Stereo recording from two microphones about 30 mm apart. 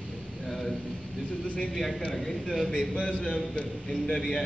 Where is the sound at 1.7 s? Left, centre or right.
Centre.